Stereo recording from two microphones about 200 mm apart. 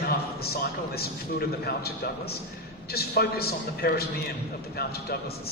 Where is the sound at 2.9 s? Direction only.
55° left (ahead or behind).